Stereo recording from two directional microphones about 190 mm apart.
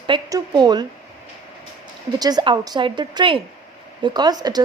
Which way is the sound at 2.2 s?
20° right (ahead or behind).